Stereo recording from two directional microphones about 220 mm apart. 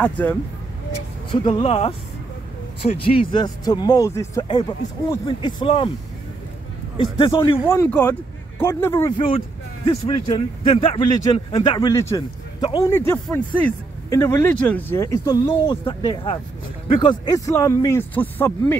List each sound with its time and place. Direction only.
0.0 s speech: 10° left (ahead or behind)
1.3 s speech: 25° left (ahead or behind)
7.0 s speech: 20° left (ahead or behind)